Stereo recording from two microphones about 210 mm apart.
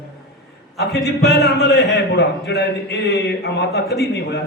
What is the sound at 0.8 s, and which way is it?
A man's voice, 50° left (ahead or behind).